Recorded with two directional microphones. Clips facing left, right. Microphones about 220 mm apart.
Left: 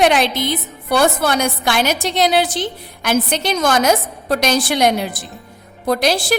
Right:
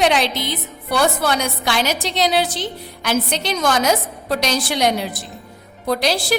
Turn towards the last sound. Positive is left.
turn(degrees=50)  # may be behind; listen again after turning